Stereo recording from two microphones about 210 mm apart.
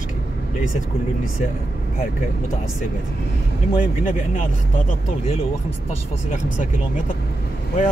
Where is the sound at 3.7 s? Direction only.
40° left (ahead or behind).